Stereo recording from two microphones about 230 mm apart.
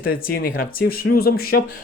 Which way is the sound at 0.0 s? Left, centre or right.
Left.